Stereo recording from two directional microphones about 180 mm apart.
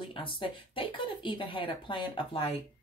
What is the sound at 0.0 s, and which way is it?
Speech, 30° left (ahead or behind).